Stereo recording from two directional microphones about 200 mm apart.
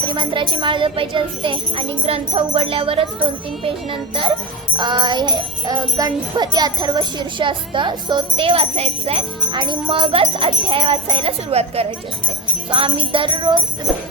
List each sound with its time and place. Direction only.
0.0 s music: 25° right (ahead or behind)
4.8 s music: 20° right (ahead or behind)